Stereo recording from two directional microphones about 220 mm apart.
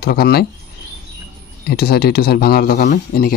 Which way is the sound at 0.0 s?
45° left (ahead or behind).